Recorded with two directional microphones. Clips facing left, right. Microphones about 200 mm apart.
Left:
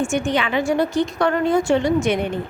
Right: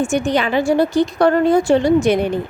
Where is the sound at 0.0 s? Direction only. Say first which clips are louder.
Right 3 dB; 35° right (ahead or behind).